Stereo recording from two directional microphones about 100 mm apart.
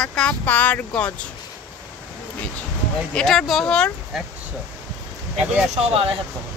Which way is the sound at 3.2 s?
5° left (ahead or behind).